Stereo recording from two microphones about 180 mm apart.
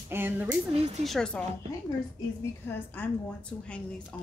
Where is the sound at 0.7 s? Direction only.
35° right (ahead or behind).